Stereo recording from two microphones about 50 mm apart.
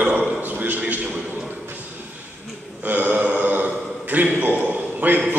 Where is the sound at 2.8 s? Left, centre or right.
Right.